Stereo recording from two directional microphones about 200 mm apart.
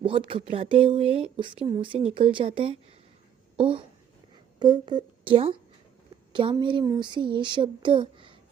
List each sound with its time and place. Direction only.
0.0 s speech: 25° right (ahead or behind)